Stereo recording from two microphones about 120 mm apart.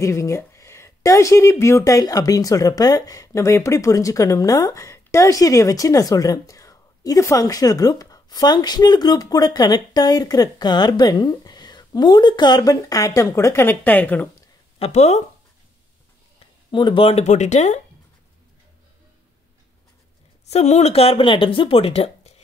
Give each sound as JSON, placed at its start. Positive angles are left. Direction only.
{"t": 0.0, "sound": "speech", "side_deg": 25}
{"t": 14.8, "sound": "speech", "side_deg": 70}
{"t": 16.7, "sound": "speech", "side_deg": 45}
{"t": 20.4, "sound": "speech", "side_deg": 65}